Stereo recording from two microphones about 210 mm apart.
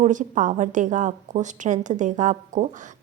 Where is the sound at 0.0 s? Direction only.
35° right (ahead or behind).